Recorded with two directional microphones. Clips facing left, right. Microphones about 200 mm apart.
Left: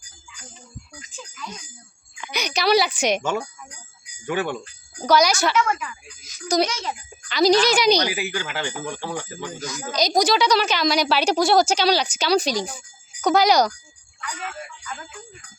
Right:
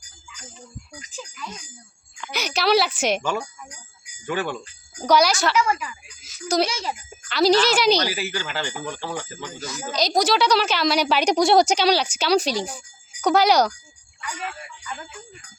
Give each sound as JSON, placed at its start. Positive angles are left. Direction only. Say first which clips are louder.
{"t": 1.1, "sound": "speech", "louder": "right 1 dB", "side_deg": -5}
{"t": 4.3, "sound": "speech", "louder": "left 1 dB", "side_deg": 15}
{"t": 5.0, "sound": "speech", "louder": "even", "side_deg": -10}
{"t": 7.9, "sound": "speech", "louder": "left 1 dB", "side_deg": 15}
{"t": 9.0, "sound": "speech", "louder": "left 1 dB", "side_deg": -5}
{"t": 11.8, "sound": "speech", "louder": "even", "side_deg": -10}